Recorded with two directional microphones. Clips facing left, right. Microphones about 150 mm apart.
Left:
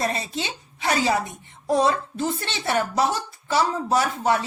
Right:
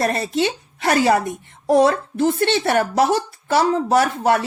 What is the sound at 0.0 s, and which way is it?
Speech, 60° right (ahead or behind).